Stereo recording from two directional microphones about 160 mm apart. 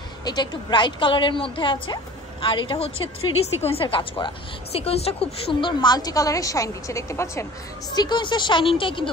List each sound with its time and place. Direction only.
0.2 s a woman's voice: 25° left (ahead or behind)